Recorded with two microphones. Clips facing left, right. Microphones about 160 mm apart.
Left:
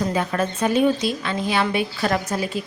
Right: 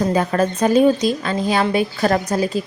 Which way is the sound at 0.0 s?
40° right (ahead or behind).